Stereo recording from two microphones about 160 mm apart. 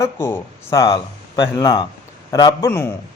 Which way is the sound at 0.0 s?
15° left (ahead or behind).